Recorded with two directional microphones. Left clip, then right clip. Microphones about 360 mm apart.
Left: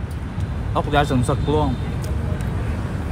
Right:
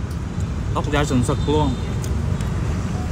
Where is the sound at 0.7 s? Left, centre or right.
Centre.